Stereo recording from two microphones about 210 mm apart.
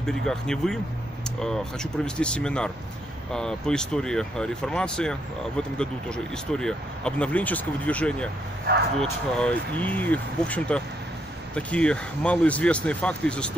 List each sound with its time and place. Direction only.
0.0 s speech: 5° left (ahead or behind)
8.7 s speech: 45° right (ahead or behind)
9.4 s speech: 5° left (ahead or behind)